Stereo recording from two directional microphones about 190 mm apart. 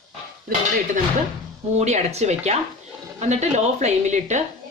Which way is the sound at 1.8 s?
35° right (ahead or behind).